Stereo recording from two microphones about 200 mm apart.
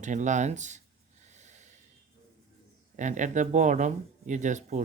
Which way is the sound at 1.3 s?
35° right (ahead or behind).